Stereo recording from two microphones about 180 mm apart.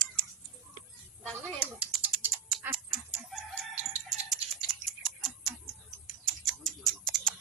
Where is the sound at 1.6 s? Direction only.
5° right (ahead or behind).